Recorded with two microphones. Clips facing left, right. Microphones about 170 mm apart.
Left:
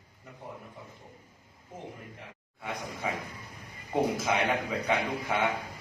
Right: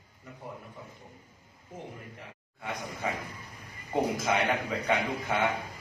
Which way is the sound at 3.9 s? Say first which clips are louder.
Even; 5° left (ahead or behind).